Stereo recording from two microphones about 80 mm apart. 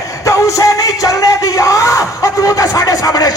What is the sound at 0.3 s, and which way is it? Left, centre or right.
Music, left.